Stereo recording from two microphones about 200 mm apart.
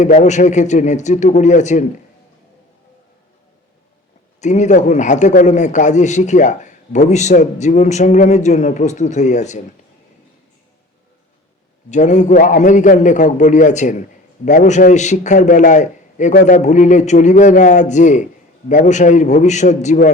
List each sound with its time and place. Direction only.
0.0 s a man's voice: 35° left (ahead or behind)
4.4 s a man's voice: 35° left (ahead or behind)
11.9 s a man's voice: 35° left (ahead or behind)